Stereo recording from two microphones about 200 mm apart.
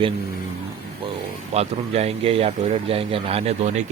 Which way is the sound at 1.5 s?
30° right (ahead or behind).